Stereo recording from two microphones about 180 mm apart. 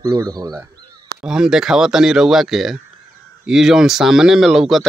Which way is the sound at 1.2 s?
5° right (ahead or behind).